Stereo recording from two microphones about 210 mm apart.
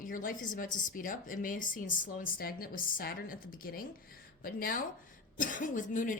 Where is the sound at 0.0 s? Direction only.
40° left (ahead or behind).